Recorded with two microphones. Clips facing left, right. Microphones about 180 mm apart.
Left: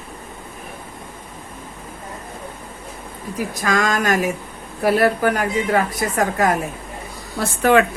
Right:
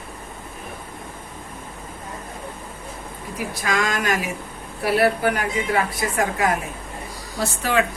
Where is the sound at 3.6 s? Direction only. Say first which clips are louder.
Left 4 dB; 45° left (ahead or behind).